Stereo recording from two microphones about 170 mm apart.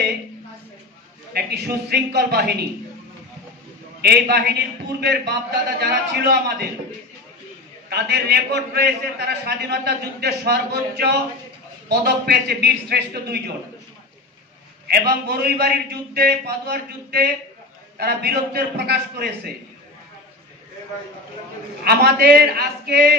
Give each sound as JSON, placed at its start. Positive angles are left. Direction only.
{"t": 1.3, "sound": "a man's voice", "side_deg": -70}
{"t": 4.0, "sound": "a man's voice", "side_deg": -70}
{"t": 7.9, "sound": "a man's voice", "side_deg": -75}
{"t": 14.9, "sound": "a man's voice", "side_deg": -65}
{"t": 21.8, "sound": "a man's voice", "side_deg": -65}